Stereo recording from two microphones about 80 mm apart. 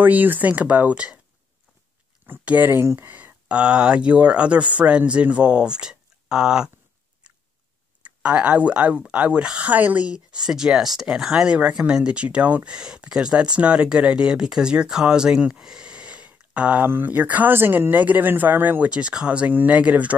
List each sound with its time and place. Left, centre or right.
0.0 s speech: right
2.2 s speech: right
3.4 s speech: centre
8.0 s speech: centre